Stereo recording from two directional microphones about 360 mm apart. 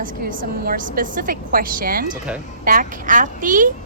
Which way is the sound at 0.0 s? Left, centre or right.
Right.